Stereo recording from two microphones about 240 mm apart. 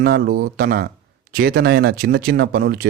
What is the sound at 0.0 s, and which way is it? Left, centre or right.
Speech, right.